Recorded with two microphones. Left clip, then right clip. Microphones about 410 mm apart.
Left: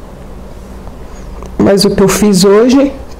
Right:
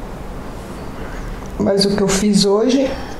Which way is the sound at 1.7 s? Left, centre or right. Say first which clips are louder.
Left 5 dB; left.